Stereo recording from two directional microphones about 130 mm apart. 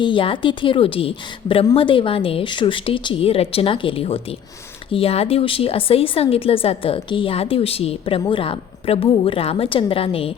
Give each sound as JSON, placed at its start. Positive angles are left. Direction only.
{"t": 0.0, "sound": "a woman's voice", "side_deg": 40}